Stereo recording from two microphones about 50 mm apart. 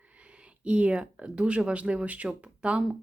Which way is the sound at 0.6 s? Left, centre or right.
Right.